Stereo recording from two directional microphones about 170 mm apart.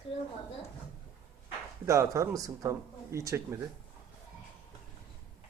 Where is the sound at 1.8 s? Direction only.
15° right (ahead or behind).